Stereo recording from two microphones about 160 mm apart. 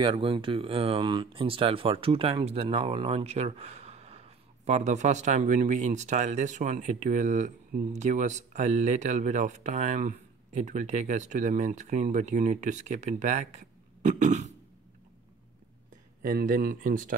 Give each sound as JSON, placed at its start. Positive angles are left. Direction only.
{"t": 0.0, "sound": "speech", "side_deg": -30}
{"t": 16.3, "sound": "speech", "side_deg": -65}